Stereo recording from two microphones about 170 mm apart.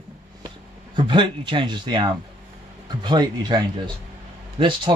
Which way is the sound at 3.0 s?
25° right (ahead or behind).